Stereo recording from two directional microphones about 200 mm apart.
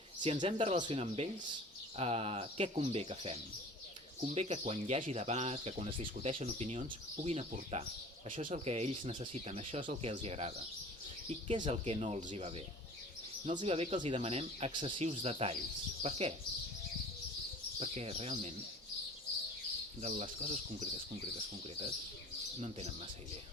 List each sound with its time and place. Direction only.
0.2 s speech: 25° right (ahead or behind)
13.6 s speech: 30° right (ahead or behind)
17.7 s speech: 30° right (ahead or behind)
20.0 s speech: 35° right (ahead or behind)